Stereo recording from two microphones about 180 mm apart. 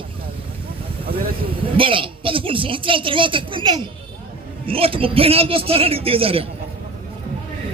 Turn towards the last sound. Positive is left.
turn(degrees=-30)  # may be behind; listen again after turning